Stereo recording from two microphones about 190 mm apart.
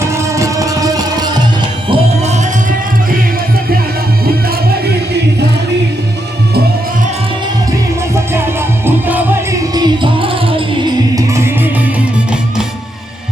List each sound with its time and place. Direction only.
0.0 s music: 15° right (ahead or behind)
1.9 s music: 35° right (ahead or behind)
8.1 s music: 10° right (ahead or behind)
9.7 s music: 25° right (ahead or behind)